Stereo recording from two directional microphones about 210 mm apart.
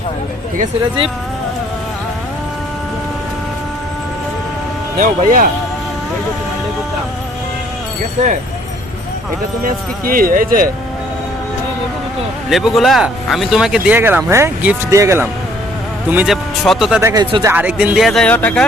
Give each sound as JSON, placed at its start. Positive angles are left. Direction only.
{"t": 4.9, "sound": "speech", "side_deg": -40}
{"t": 9.6, "sound": "speech", "side_deg": -40}
{"t": 12.5, "sound": "speech", "side_deg": 0}
{"t": 17.0, "sound": "speech", "side_deg": -15}